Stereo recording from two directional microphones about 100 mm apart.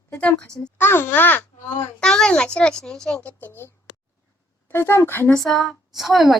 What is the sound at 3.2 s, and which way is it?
A child's voice, 20° left (ahead or behind).